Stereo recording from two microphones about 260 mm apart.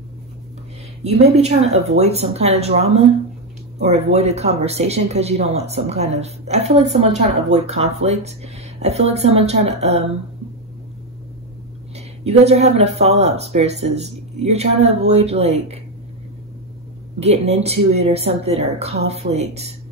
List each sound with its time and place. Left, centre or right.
1.0 s speech: right
12.3 s speech: right
17.2 s speech: right